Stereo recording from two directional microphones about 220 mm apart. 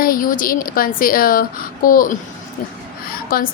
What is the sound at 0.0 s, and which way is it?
A woman's voice, 40° left (ahead or behind).